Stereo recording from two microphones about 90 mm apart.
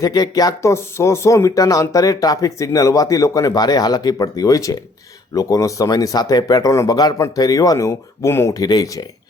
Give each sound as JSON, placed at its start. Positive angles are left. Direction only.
{"t": 0.0, "sound": "speech", "side_deg": 45}
{"t": 8.5, "sound": "speech", "side_deg": 45}